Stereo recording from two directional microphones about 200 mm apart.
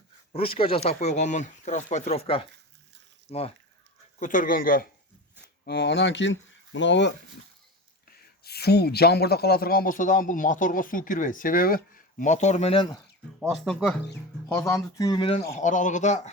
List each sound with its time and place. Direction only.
0.3 s speech: 25° left (ahead or behind)
4.2 s a man's voice: 40° left (ahead or behind)
5.6 s speech: 55° left (ahead or behind)
8.4 s a man's voice: 55° left (ahead or behind); by 13.0 s 25° left (ahead or behind)
13.5 s speech: centre (ahead or behind)
14.5 s speech: 15° left (ahead or behind)
15.5 s speech: 40° left (ahead or behind)